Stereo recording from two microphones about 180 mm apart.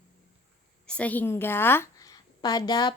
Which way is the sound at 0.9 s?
10° left (ahead or behind).